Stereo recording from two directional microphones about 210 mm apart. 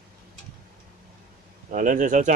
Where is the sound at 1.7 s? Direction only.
40° right (ahead or behind).